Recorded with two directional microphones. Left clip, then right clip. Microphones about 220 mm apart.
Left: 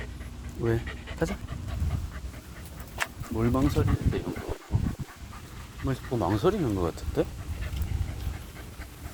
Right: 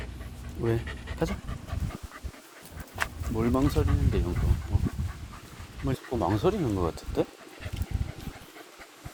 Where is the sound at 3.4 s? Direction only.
15° right (ahead or behind).